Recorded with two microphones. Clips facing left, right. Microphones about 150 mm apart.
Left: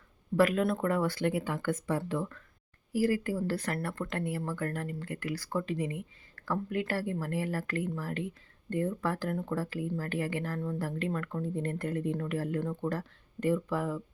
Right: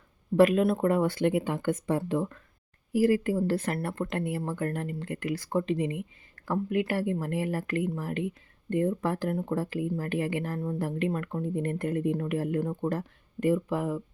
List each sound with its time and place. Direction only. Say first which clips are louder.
0.3 s speech: right 5 dB; 20° right (ahead or behind)